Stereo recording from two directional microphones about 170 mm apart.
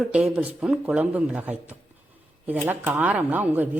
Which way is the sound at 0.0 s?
5° right (ahead or behind).